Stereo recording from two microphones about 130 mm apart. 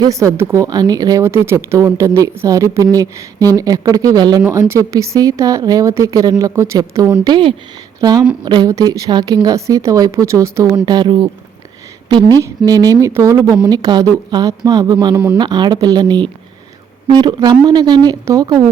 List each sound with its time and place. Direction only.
0.0 s speech: 25° right (ahead or behind)
8.4 s speech: 30° right (ahead or behind)
10.8 s a woman's voice: 35° right (ahead or behind)
12.4 s a woman's voice: 30° right (ahead or behind)